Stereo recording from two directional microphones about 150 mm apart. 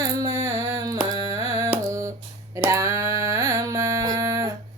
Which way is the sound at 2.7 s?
20° right (ahead or behind).